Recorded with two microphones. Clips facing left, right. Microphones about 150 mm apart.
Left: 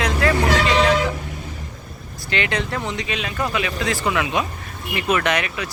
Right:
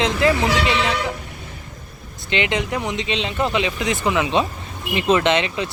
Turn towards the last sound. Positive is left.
turn(degrees=-25)  # may be behind; listen again after turning